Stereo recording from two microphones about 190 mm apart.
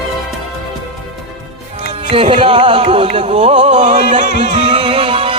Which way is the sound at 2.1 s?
30° right (ahead or behind).